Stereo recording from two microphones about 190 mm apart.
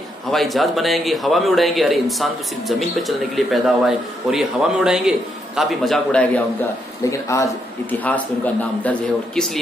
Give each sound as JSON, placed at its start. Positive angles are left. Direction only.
{"t": 0.3, "sound": "a man's voice", "side_deg": 0}
{"t": 7.1, "sound": "a man's voice", "side_deg": 15}